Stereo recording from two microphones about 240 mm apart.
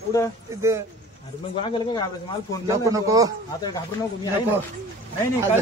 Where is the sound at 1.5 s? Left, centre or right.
Centre.